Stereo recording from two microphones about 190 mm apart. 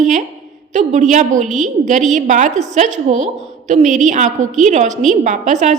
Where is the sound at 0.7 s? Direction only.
40° right (ahead or behind).